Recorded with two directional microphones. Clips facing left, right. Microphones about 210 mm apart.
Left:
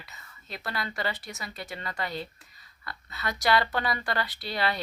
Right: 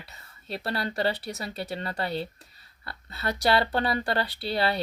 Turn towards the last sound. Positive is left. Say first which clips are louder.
# right 3 dB
turn(degrees=-30)  # may be behind; listen again after turning